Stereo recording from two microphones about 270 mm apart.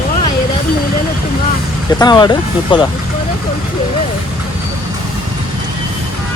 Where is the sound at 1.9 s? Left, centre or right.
Centre.